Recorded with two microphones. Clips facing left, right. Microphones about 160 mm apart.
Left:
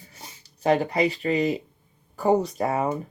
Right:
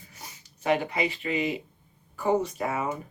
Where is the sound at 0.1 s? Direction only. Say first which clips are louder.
Left 1 dB; 35° left (ahead or behind).